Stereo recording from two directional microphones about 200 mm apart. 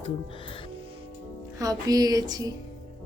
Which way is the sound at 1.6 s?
20° right (ahead or behind).